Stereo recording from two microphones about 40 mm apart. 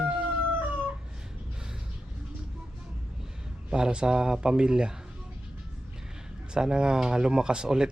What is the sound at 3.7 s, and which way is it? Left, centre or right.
Speech, right.